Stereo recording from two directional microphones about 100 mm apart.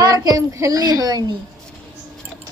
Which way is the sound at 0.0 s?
40° right (ahead or behind).